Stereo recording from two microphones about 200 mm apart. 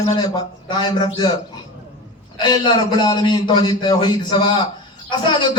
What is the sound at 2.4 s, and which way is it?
A man's voice, 20° left (ahead or behind).